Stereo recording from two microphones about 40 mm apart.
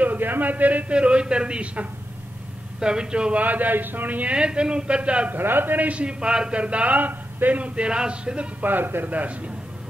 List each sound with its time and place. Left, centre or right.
0.0 s a man's voice: right
0.9 s a man's voice: right
3.3 s a man's voice: right
4.3 s a man's voice: right
5.3 s a man's voice: right
5.9 s a man's voice: right
6.1 s a man's voice: right
7.0 s a man's voice: right
7.6 s a man's voice: right
8.6 s a man's voice: right
9.1 s a man's voice: right